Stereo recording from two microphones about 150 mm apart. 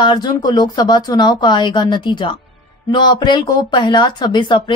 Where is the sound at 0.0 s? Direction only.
30° left (ahead or behind).